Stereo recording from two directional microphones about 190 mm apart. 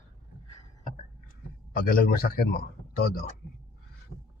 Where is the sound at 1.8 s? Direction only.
50° left (ahead or behind).